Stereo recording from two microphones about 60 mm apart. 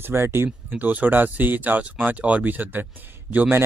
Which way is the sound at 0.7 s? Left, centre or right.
Right.